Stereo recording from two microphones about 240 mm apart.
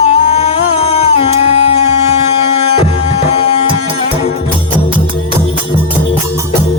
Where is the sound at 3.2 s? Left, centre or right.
Left.